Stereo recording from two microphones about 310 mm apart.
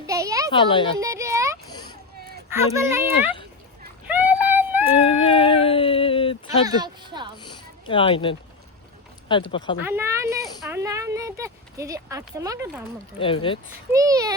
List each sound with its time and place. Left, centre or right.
0.1 s a sound: centre
0.5 s speech: centre
0.9 s a sound: centre
2.5 s speech: centre
4.0 s a sound: centre
5.0 s speech: centre
6.7 s speech: centre
7.3 s speech: centre
9.5 s speech: centre
9.8 s speech: centre
13.1 s speech: centre
13.9 s speech: centre